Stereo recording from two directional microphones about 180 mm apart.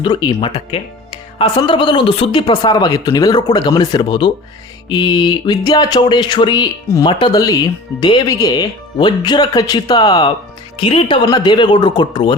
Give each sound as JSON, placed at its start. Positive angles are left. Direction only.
{"t": 0.0, "sound": "speech", "side_deg": 25}